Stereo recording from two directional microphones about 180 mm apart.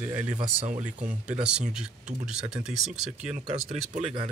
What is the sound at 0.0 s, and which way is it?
Speech, 10° right (ahead or behind).